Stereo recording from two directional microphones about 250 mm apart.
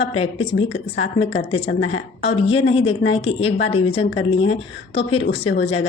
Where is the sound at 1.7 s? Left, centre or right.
Left.